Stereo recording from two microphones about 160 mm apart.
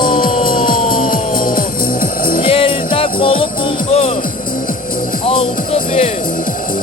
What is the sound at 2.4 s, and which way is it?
Music, 35° left (ahead or behind).